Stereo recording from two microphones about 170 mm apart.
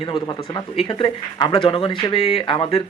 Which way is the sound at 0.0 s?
30° left (ahead or behind).